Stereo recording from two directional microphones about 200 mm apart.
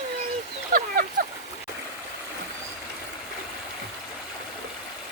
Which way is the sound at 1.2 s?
45° right (ahead or behind).